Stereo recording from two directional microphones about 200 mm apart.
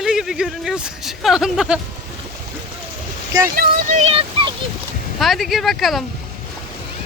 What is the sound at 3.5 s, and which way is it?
Speech, 45° right (ahead or behind).